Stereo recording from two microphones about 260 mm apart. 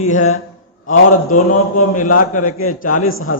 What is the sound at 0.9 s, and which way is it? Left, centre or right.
A man's voice, left.